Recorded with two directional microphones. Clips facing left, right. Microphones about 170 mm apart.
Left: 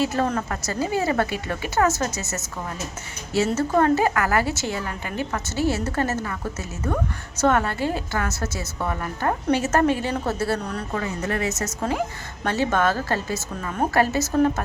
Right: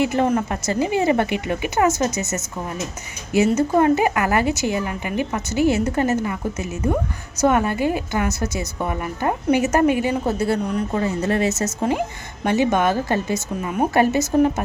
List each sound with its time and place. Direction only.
0.0 s a woman's voice: 15° right (ahead or behind)
10.9 s a woman's voice: 30° right (ahead or behind)